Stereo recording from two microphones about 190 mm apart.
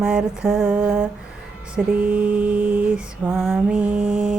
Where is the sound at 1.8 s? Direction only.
5° right (ahead or behind).